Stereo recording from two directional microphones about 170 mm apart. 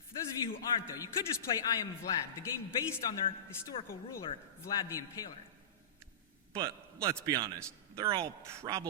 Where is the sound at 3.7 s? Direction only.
30° left (ahead or behind).